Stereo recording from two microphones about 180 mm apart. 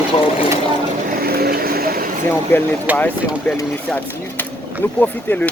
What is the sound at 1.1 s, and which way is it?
Vehicle, 55° right (ahead or behind).